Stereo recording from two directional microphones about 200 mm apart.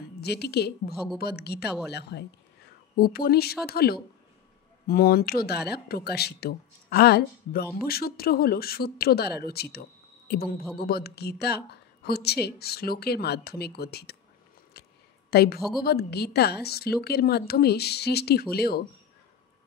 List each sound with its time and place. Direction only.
0.2 s a woman's voice: 55° left (ahead or behind)